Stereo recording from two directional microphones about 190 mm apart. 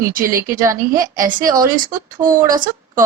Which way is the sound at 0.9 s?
45° right (ahead or behind).